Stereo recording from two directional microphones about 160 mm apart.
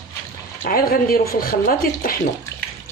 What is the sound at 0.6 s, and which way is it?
Speech, 65° left (ahead or behind).